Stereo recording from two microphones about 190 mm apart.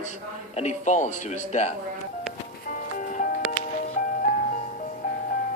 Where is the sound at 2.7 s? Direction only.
45° left (ahead or behind).